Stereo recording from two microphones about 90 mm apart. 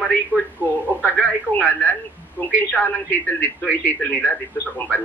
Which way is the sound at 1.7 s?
20° left (ahead or behind).